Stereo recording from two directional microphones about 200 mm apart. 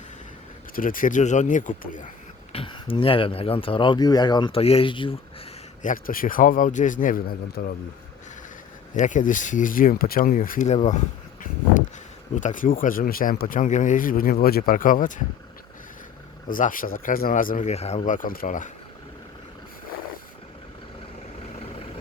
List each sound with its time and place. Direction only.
0.8 s speech: 45° left (ahead or behind)
2.5 s speech: 25° left (ahead or behind)
5.8 s speech: 45° left (ahead or behind)
9.0 s speech: 40° left (ahead or behind)
12.4 s speech: 40° left (ahead or behind)
16.5 s speech: 40° left (ahead or behind)